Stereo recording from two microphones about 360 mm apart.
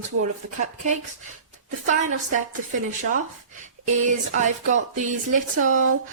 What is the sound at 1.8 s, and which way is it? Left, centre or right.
Speech, right.